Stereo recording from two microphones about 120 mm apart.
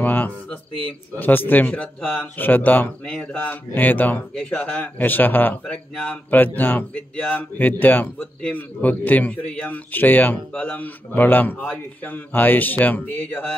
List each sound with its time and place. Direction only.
0.0 s speech: 15° left (ahead or behind)